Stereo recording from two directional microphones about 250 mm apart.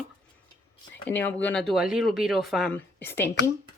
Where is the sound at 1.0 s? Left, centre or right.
Centre.